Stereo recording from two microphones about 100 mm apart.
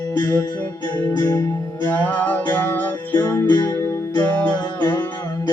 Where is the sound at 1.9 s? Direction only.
15° left (ahead or behind).